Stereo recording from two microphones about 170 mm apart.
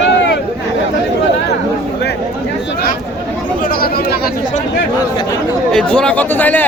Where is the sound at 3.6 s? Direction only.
65° left (ahead or behind).